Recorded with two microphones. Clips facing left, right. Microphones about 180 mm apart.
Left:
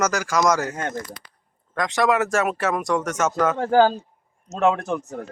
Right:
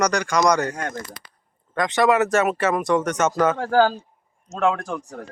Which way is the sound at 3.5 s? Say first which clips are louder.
Left 1 dB; 20° left (ahead or behind).